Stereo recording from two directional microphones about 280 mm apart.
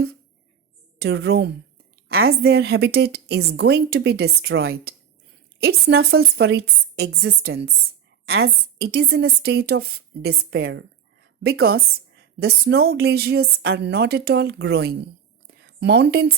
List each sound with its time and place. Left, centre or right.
0.9 s a woman's voice: right